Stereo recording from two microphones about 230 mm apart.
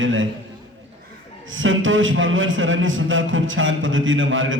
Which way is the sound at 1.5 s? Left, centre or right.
Right.